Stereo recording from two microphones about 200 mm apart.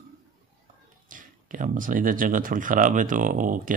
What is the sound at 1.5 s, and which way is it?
Speech, 40° right (ahead or behind).